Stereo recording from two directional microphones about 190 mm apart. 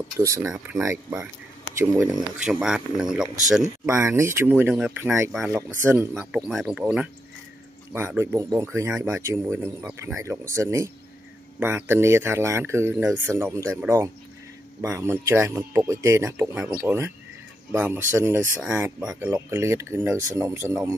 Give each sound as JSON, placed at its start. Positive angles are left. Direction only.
{"t": 0.2, "sound": "speech", "side_deg": -15}
{"t": 3.8, "sound": "speech", "side_deg": -15}